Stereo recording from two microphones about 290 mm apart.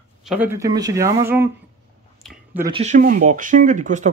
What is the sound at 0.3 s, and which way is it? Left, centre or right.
Speech, centre.